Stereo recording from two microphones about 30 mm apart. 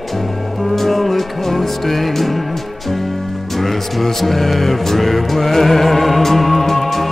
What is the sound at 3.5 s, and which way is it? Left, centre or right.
Music, centre.